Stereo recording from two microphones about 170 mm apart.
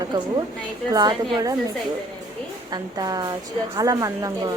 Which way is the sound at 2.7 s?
25° right (ahead or behind).